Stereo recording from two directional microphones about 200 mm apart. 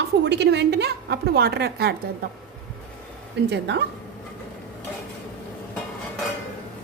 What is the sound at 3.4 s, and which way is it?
Speech, 55° right (ahead or behind).